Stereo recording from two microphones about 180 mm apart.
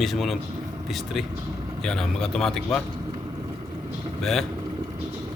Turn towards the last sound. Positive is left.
turn(degrees=0)  # may be behind; listen again after turning